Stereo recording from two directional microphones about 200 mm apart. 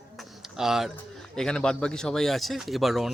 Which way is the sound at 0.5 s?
Centre (ahead or behind).